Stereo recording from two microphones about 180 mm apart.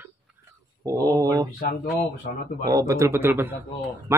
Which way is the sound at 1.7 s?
50° left (ahead or behind).